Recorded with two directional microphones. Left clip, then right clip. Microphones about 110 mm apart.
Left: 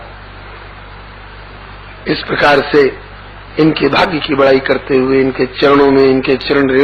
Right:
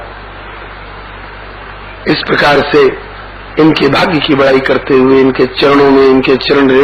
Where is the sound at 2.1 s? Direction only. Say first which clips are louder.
Right 2 dB; 35° left (ahead or behind).